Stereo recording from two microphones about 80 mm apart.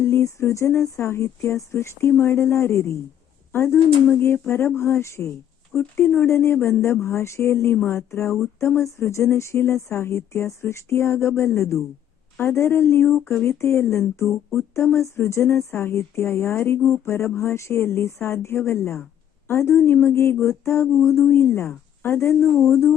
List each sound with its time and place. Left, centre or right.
0.0 s speech: left
5.7 s speech: centre
6.1 s speech: left